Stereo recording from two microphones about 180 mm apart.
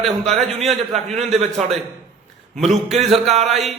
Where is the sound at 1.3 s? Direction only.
35° right (ahead or behind).